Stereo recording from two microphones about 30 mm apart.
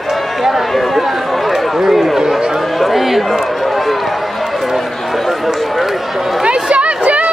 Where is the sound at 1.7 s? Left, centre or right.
Centre.